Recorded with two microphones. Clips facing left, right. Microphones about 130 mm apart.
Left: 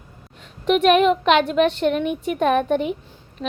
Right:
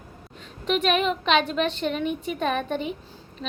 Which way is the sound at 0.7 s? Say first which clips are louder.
Left 7 dB; 10° left (ahead or behind).